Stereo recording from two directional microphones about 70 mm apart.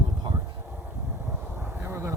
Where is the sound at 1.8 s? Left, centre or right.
Right.